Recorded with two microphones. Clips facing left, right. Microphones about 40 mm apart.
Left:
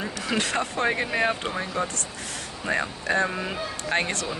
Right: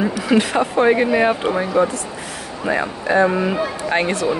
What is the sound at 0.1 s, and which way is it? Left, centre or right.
Speech, centre.